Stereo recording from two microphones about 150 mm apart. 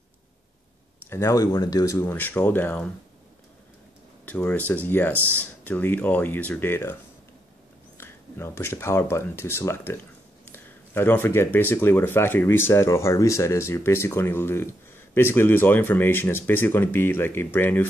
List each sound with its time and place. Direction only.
1.1 s speech: 20° left (ahead or behind)
4.3 s speech: 10° left (ahead or behind)
5.1 s speech: 15° right (ahead or behind)
5.6 s speech: 10° left (ahead or behind)
8.0 s speech: 15° left (ahead or behind)